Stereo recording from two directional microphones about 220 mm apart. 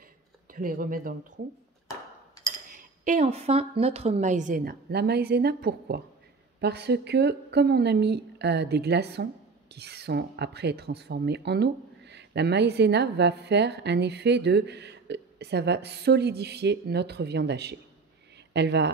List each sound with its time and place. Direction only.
0.5 s a woman's voice: 40° right (ahead or behind)
2.7 s a woman's voice: 35° right (ahead or behind); by 18.9 s 50° right (ahead or behind)